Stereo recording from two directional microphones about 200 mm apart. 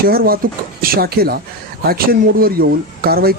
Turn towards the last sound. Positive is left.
turn(degrees=-50)  # may be behind; listen again after turning